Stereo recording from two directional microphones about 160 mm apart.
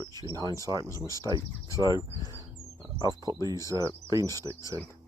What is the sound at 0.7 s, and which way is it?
Speech, 20° left (ahead or behind).